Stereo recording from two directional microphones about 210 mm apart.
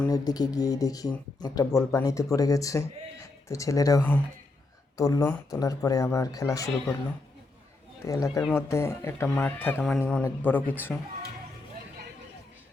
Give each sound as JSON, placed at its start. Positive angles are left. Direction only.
{"t": 0.0, "sound": "speech", "side_deg": 15}
{"t": 8.0, "sound": "speech", "side_deg": 15}